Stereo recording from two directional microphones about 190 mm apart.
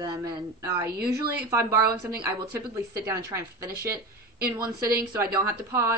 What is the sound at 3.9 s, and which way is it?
Speech, 50° right (ahead or behind).